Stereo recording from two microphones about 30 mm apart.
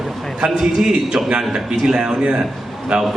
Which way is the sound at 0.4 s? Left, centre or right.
Right.